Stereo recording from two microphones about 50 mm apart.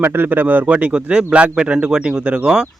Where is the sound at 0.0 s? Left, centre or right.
Right.